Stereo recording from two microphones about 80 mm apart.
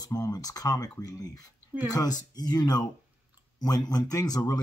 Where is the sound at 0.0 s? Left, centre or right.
Left.